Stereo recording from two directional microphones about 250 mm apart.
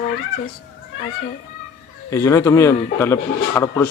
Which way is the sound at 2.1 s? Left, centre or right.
Centre.